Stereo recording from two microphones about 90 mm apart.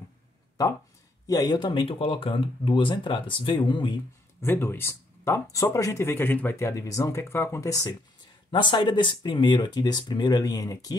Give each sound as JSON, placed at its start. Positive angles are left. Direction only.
{"t": 1.2, "sound": "speech", "side_deg": 45}
{"t": 4.4, "sound": "speech", "side_deg": 25}
{"t": 8.5, "sound": "speech", "side_deg": 60}